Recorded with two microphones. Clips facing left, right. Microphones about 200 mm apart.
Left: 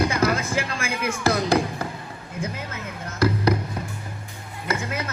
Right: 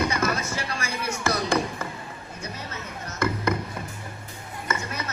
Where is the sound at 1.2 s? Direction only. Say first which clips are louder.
Left 4 dB; 35° left (ahead or behind).